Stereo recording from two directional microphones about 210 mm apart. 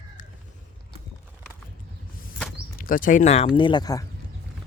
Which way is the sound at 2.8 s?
40° left (ahead or behind).